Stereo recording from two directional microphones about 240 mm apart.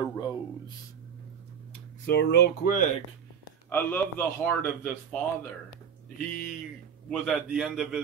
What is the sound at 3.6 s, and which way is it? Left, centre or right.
Speech, centre.